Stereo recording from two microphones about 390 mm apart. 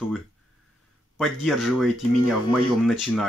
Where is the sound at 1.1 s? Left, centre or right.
Centre.